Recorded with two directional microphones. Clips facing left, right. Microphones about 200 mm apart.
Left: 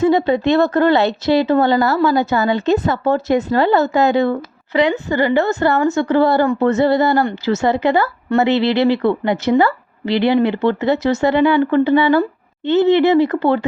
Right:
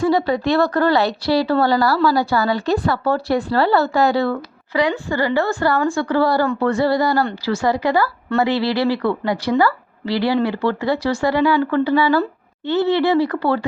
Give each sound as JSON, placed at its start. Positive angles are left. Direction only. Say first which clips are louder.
{"t": 0.0, "sound": "speech", "louder": "left 3 dB", "side_deg": 20}